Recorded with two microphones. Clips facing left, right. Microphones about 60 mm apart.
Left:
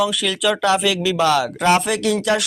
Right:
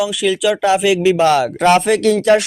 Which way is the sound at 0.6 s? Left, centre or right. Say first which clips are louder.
Right 6 dB; right.